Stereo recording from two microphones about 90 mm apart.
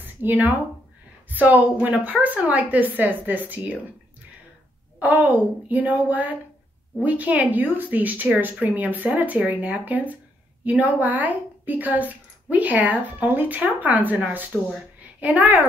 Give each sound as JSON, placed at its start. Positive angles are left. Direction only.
{"t": 0.0, "sound": "a woman's voice", "side_deg": -20}
{"t": 5.0, "sound": "a woman's voice", "side_deg": -20}
{"t": 15.0, "sound": "a sound", "side_deg": -15}